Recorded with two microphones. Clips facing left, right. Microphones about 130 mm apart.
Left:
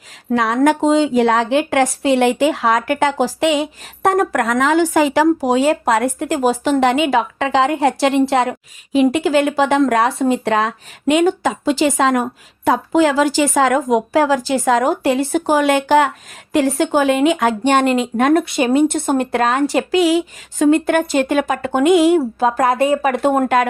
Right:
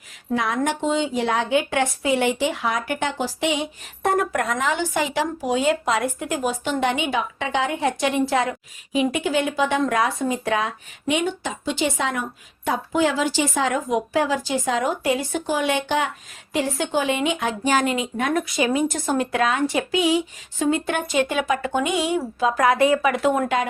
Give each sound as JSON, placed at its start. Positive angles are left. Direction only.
{"t": 0.3, "sound": "a woman's voice", "side_deg": 80}
{"t": 0.9, "sound": "a woman's voice", "side_deg": 90}
{"t": 2.4, "sound": "a woman's voice", "side_deg": 90}
{"t": 5.6, "sound": "speech", "side_deg": 55}
{"t": 6.4, "sound": "a woman's voice", "side_deg": 90}
{"t": 14.6, "sound": "speech", "side_deg": 65}
{"t": 15.5, "sound": "a woman's voice", "side_deg": 85}
{"t": 16.5, "sound": "speech", "side_deg": 60}
{"t": 20.7, "sound": "speech", "side_deg": 55}
{"t": 22.4, "sound": "speech", "side_deg": 40}
{"t": 22.7, "sound": "speech", "side_deg": 30}
{"t": 23.0, "sound": "speech", "side_deg": 45}